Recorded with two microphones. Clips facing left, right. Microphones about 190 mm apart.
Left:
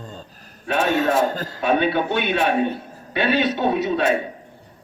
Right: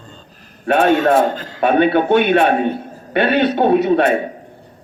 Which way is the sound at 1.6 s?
60° right (ahead or behind).